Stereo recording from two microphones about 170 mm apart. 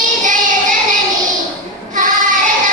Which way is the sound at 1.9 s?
50° right (ahead or behind).